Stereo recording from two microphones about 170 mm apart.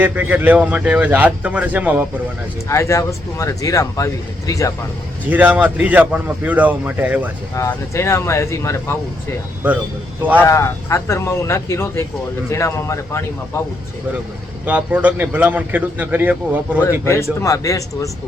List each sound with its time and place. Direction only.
0.0 s a man's voice: 10° right (ahead or behind)
2.6 s a man's voice: 15° left (ahead or behind)
5.3 s a man's voice: 10° right (ahead or behind)
7.5 s speech: 15° left (ahead or behind)
9.6 s a man's voice: 10° right (ahead or behind)
10.3 s speech: 15° left (ahead or behind)
14.6 s a man's voice: 10° right (ahead or behind)
16.8 s a man's voice: 15° left (ahead or behind)